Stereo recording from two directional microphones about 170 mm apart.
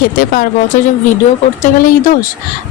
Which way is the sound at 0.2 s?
55° left (ahead or behind).